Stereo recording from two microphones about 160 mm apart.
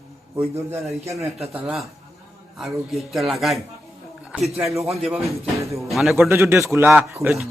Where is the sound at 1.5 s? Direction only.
5° right (ahead or behind).